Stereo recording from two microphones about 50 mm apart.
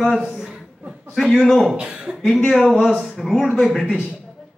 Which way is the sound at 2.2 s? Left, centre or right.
Centre.